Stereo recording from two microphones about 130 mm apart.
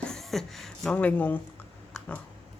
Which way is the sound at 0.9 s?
10° left (ahead or behind).